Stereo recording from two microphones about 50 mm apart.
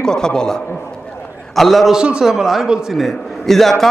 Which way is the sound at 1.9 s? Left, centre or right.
Centre.